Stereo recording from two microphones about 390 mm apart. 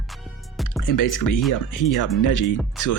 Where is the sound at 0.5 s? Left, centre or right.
Centre.